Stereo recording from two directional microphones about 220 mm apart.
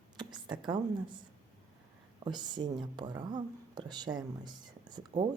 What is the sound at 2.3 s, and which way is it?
Speech, 20° right (ahead or behind).